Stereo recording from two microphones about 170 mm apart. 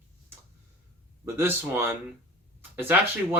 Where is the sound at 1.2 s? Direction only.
15° right (ahead or behind).